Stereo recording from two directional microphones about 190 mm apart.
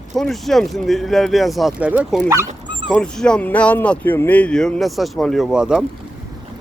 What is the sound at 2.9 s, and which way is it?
Speech, 5° left (ahead or behind).